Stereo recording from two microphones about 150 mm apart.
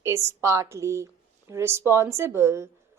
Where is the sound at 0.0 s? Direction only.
15° right (ahead or behind).